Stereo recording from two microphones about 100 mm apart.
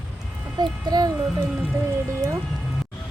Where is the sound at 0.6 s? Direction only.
40° right (ahead or behind).